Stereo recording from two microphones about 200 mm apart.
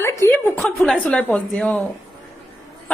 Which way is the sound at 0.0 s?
15° left (ahead or behind).